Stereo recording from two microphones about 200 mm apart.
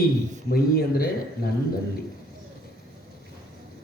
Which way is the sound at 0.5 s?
50° left (ahead or behind).